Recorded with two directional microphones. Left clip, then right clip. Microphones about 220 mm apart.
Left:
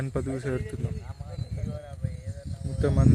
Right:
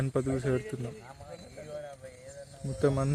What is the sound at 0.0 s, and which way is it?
Speech, 5° left (ahead or behind).